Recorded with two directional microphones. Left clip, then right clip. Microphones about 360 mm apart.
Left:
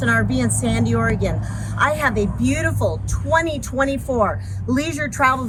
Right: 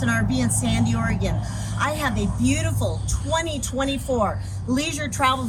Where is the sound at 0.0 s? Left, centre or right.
Centre.